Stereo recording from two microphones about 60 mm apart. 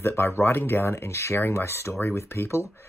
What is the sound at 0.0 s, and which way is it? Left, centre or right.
Speech, left.